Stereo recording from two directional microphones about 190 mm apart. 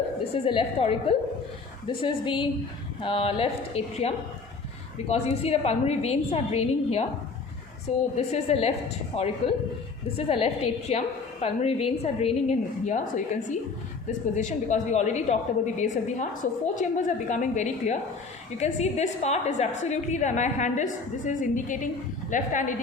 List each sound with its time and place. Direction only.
0.4 s a woman's voice: 30° left (ahead or behind)
8.1 s a woman's voice: 30° left (ahead or behind)